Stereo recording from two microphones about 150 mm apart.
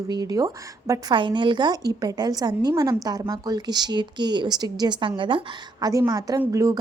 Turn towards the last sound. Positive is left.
turn(degrees=-20)  # may be behind; listen again after turning